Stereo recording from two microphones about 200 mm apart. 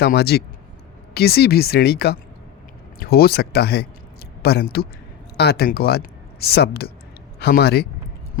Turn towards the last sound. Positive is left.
turn(degrees=55)  # may be behind; listen again after turning